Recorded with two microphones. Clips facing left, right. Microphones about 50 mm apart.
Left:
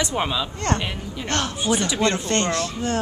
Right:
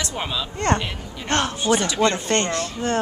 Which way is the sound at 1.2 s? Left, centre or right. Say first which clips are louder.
Right 3 dB; centre.